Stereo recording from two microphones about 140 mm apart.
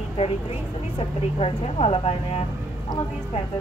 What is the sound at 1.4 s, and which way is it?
Speech, 45° left (ahead or behind).